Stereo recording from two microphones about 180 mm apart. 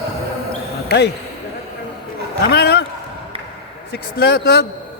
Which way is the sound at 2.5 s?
60° left (ahead or behind).